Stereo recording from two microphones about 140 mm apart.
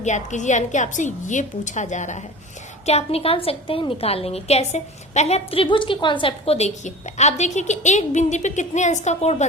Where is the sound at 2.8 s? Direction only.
50° left (ahead or behind).